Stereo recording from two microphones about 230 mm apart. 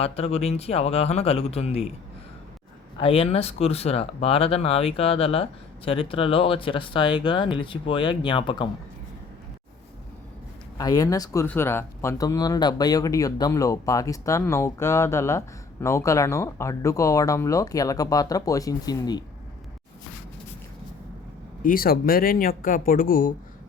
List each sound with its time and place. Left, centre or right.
0.0 s speech: left
3.0 s speech: left
10.8 s speech: centre
21.6 s speech: left